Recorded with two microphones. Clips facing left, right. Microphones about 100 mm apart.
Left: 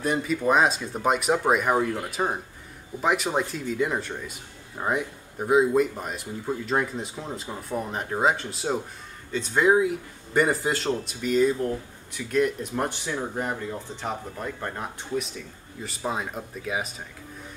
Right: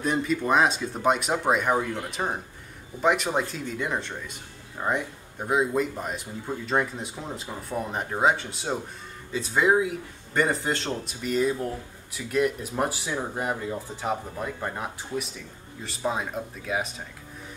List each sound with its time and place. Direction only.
0.0 s speech: centre (ahead or behind)